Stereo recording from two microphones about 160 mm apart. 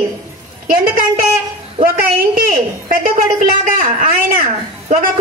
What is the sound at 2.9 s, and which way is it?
Speech, 60° right (ahead or behind).